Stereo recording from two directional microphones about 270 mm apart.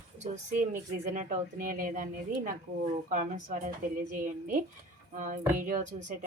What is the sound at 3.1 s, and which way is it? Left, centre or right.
Speech, right.